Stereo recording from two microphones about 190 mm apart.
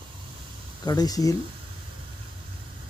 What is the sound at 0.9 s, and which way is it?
Speech, 20° left (ahead or behind).